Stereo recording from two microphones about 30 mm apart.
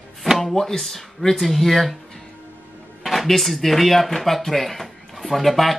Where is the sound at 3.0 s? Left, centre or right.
Centre.